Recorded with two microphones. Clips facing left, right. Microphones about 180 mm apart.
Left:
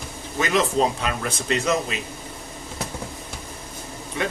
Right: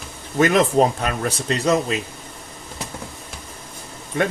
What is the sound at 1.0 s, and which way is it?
Speech, 40° right (ahead or behind).